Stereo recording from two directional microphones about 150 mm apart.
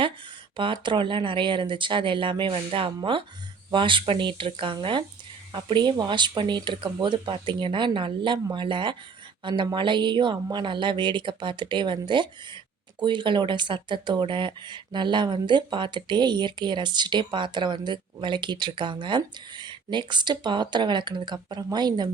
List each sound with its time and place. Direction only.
0.5 s speech: 35° right (ahead or behind)